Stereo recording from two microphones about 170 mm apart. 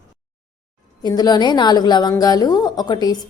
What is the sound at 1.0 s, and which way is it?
A woman's voice, 25° left (ahead or behind).